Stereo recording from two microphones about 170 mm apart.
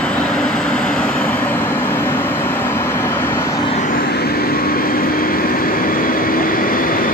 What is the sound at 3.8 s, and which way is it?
Vehicle, 60° left (ahead or behind).